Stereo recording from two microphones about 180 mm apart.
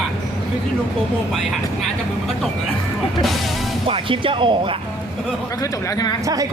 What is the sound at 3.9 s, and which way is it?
Speech, 30° right (ahead or behind).